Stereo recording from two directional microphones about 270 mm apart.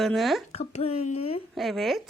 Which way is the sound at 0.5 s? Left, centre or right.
Left.